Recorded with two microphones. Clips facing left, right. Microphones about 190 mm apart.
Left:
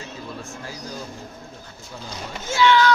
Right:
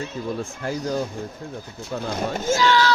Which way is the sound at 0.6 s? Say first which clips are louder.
Right 9 dB; 60° right (ahead or behind).